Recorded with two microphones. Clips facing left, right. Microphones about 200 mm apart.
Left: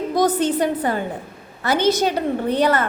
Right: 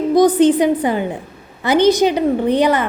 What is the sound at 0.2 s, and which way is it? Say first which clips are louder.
A woman's voice: right 7 dB; 15° right (ahead or behind).